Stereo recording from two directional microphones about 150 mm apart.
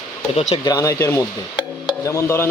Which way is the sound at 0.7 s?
25° left (ahead or behind).